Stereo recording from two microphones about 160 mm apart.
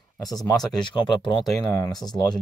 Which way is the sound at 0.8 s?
30° left (ahead or behind).